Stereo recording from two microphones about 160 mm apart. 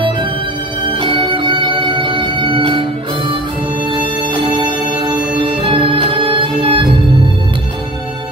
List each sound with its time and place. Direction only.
0.9 s music: 30° right (ahead or behind)
4.5 s music: 30° right (ahead or behind)